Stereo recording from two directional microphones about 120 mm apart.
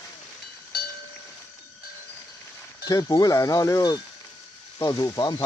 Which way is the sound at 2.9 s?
30° left (ahead or behind).